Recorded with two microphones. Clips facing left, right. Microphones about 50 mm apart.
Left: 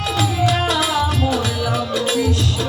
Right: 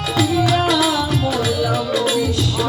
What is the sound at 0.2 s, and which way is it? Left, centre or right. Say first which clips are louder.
Music: right 3 dB; left.